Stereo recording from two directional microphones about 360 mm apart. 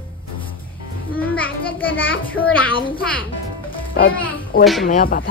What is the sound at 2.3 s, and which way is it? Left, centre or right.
Speech, centre.